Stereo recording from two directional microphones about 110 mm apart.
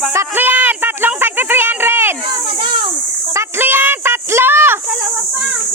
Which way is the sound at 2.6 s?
50° right (ahead or behind).